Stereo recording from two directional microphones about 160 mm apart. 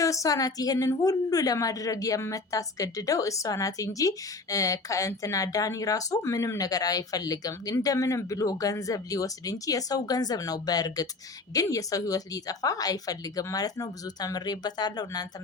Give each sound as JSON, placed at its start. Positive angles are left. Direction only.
{"t": 0.0, "sound": "a woman's voice", "side_deg": 20}